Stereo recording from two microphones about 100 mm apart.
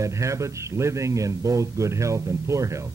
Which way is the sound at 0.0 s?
30° right (ahead or behind).